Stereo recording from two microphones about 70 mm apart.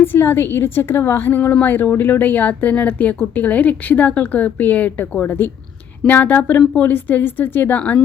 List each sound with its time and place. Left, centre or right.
0.0 s a woman's voice: left
7.8 s speech: centre